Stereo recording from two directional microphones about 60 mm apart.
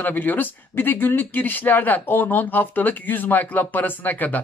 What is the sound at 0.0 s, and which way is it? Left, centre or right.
Speech, left.